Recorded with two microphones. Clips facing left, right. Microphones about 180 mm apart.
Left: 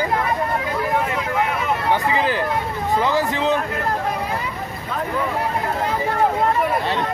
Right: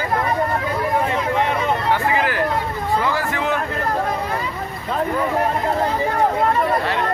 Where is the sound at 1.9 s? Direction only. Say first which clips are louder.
Left 3 dB; 20° left (ahead or behind).